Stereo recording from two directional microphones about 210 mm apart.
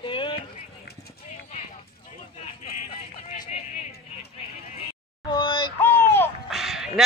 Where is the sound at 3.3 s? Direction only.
30° left (ahead or behind).